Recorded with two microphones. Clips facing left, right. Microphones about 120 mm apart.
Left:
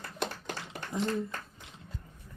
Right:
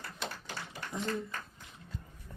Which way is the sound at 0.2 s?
55° left (ahead or behind).